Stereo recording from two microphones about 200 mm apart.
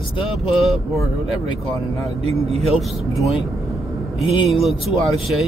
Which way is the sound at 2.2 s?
30° right (ahead or behind).